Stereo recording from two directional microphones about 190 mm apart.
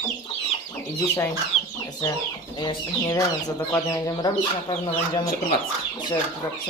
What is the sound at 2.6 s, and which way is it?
Speech, 20° left (ahead or behind).